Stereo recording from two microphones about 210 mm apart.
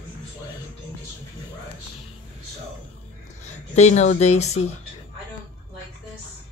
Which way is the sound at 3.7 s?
35° left (ahead or behind).